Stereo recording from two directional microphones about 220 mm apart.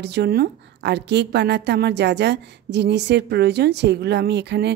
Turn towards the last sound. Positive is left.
turn(degrees=-50)  # may be behind; listen again after turning